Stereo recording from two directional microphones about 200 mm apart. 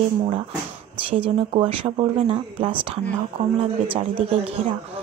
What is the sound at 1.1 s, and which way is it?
Speech, 25° right (ahead or behind).